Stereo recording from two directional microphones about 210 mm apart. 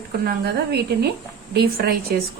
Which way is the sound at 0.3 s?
50° right (ahead or behind).